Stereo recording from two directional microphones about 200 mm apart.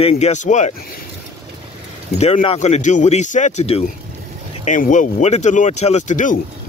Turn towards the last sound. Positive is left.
turn(degrees=40)  # may be behind; listen again after turning